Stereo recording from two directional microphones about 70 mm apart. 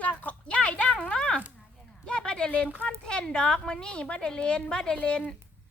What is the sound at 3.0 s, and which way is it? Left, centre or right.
A woman's voice, centre.